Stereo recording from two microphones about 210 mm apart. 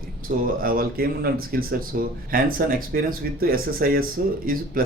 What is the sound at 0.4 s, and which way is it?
A man's voice, 45° right (ahead or behind).